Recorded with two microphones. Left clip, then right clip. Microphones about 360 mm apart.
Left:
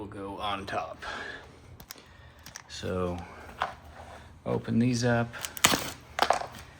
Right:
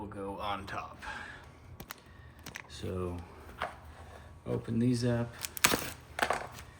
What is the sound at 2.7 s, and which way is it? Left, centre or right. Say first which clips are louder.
Speech: left 8 dB; centre.